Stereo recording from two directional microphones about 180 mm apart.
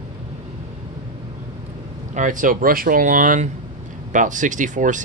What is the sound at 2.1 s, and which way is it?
Speech, 45° right (ahead or behind).